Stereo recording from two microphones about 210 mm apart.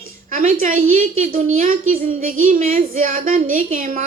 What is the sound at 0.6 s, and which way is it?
A woman's voice, 40° right (ahead or behind).